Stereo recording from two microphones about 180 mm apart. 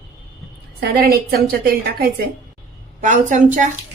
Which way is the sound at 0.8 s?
60° right (ahead or behind).